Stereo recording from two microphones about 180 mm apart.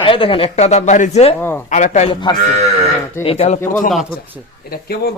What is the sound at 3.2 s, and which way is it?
Speech, 35° left (ahead or behind).